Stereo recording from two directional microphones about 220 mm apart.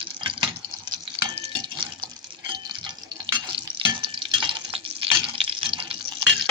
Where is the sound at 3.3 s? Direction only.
20° right (ahead or behind).